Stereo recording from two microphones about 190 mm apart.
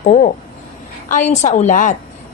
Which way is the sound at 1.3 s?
35° left (ahead or behind).